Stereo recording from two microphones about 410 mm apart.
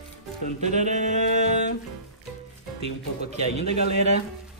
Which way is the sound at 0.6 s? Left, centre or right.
Centre.